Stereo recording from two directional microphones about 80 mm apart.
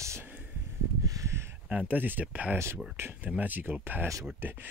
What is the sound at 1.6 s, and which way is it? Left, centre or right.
Speech, centre.